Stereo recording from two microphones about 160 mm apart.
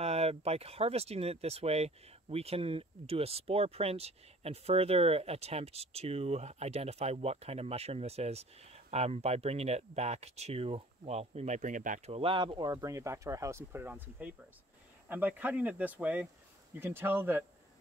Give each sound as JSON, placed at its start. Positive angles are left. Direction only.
{"t": 0.0, "sound": "speech", "side_deg": -40}
{"t": 12.1, "sound": "speech", "side_deg": -35}